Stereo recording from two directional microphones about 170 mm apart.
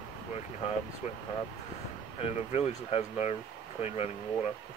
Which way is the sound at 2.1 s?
35° left (ahead or behind).